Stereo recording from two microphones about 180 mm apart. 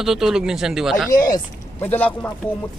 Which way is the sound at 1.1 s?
50° left (ahead or behind).